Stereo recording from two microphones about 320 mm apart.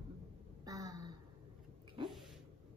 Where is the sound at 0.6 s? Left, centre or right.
Centre.